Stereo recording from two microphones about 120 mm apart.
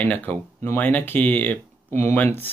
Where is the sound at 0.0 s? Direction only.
15° left (ahead or behind).